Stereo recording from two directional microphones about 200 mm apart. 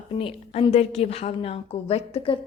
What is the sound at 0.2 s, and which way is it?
A woman's voice, 25° left (ahead or behind).